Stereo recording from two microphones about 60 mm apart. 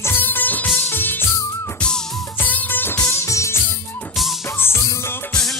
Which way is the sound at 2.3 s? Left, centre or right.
Left.